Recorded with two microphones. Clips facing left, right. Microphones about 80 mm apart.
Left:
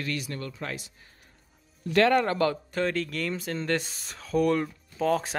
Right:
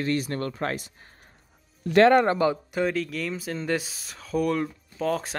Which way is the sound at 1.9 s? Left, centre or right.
Right.